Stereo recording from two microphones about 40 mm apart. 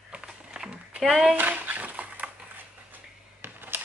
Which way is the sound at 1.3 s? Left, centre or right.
Right.